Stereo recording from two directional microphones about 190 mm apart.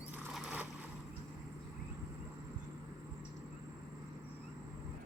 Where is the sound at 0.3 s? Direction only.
5° right (ahead or behind).